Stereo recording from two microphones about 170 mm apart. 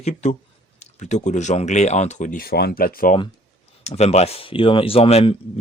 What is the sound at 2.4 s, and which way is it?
Speech, 70° left (ahead or behind).